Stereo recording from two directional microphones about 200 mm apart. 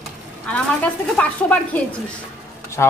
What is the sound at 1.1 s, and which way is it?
Speech, 5° left (ahead or behind).